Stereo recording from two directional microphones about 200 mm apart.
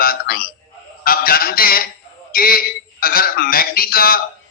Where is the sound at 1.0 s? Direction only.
45° left (ahead or behind).